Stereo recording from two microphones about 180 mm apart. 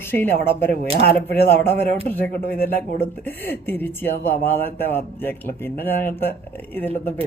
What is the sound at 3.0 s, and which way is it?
Speech, 10° left (ahead or behind).